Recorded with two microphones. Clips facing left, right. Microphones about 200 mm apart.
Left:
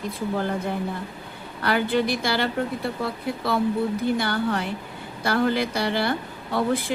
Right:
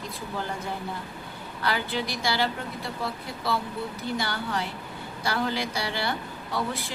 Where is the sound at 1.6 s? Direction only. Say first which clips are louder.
Left 7 dB; 55° left (ahead or behind).